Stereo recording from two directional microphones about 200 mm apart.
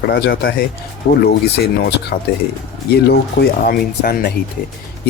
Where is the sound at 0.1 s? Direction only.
50° left (ahead or behind).